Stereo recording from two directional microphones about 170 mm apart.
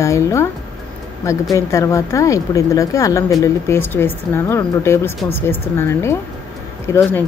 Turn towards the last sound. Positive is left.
turn(degrees=15)  # may be behind; listen again after turning